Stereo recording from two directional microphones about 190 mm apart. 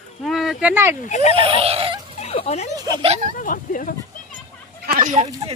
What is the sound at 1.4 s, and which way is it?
Wheeze, 30° right (ahead or behind).